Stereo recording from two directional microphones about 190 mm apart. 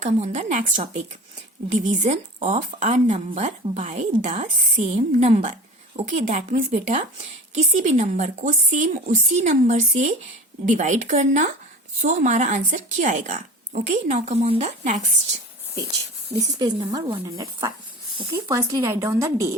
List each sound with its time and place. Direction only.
0.0 s speech: 40° right (ahead or behind)
1.7 s speech: 40° right (ahead or behind)
16.6 s a woman's voice: 20° right (ahead or behind)